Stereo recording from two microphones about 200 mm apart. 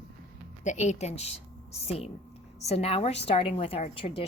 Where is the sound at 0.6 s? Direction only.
35° left (ahead or behind).